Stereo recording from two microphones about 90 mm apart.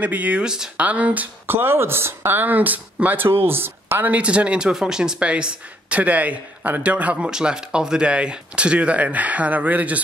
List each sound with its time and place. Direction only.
0.0 s speech: 15° right (ahead or behind)